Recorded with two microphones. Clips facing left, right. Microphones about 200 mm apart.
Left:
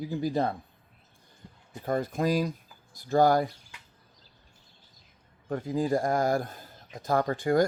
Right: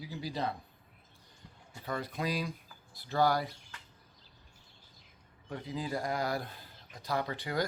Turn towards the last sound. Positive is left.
turn(degrees=45)  # may be behind; listen again after turning